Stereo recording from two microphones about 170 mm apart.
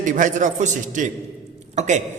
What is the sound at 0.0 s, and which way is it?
A man's voice, 50° right (ahead or behind).